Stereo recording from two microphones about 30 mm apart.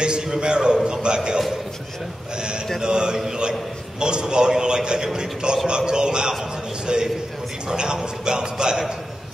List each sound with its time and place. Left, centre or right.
0.0 s a man's voice: right